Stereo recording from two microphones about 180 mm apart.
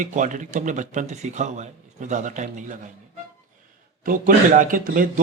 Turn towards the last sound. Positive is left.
turn(degrees=-50)  # may be behind; listen again after turning